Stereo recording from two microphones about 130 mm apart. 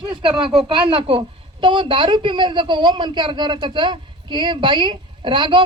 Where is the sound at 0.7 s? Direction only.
40° right (ahead or behind).